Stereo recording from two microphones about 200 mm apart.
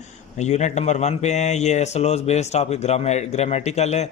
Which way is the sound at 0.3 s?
35° left (ahead or behind).